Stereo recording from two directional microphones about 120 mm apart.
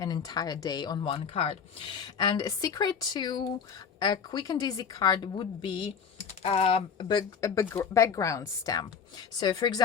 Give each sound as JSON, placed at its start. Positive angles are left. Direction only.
{"t": 0.0, "sound": "a woman's voice", "side_deg": 35}
{"t": 1.9, "sound": "a woman's voice", "side_deg": 35}
{"t": 7.9, "sound": "a woman's voice", "side_deg": 25}